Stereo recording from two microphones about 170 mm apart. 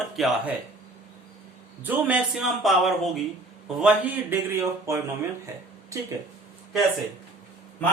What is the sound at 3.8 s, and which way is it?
Speech, 10° right (ahead or behind).